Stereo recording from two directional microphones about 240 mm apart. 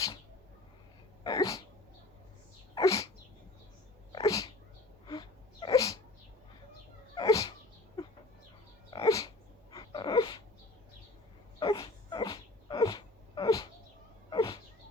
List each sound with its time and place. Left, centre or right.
1.2 s sneeze: centre
2.7 s sneeze: centre
4.1 s cat: centre
5.0 s sneeze: centre
7.2 s sneeze: centre
8.0 s a sound: centre
8.9 s dog: centre
9.7 s a sound: centre
11.6 s dog: centre
14.3 s cat: centre